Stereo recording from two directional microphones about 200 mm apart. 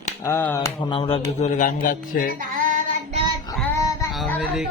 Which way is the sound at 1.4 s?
40° left (ahead or behind).